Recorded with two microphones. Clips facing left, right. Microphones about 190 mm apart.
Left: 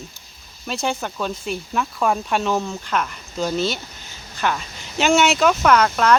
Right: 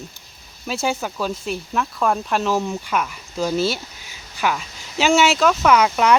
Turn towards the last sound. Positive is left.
turn(degrees=-10)  # may be behind; listen again after turning